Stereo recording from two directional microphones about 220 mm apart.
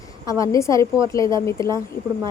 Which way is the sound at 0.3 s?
15° left (ahead or behind).